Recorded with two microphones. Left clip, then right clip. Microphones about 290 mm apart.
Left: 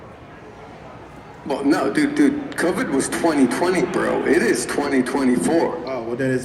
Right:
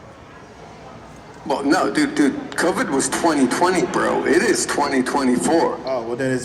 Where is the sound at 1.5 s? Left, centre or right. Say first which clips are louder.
Right 1 dB; centre.